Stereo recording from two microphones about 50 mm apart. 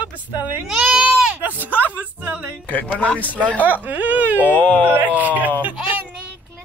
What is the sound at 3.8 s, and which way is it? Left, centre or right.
Speech, right.